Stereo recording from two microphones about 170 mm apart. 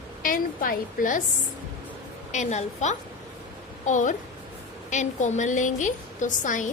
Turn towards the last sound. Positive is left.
turn(degrees=50)  # may be behind; listen again after turning